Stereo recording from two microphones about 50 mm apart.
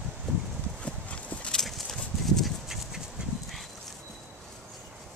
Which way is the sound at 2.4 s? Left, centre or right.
Centre.